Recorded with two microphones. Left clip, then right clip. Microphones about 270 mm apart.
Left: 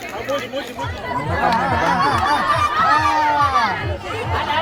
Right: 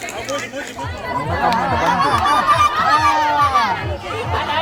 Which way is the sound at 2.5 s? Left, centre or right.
Centre.